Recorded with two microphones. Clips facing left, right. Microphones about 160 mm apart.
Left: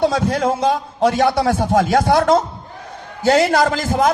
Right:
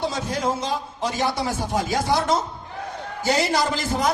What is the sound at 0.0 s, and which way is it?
A man's voice, 65° left (ahead or behind).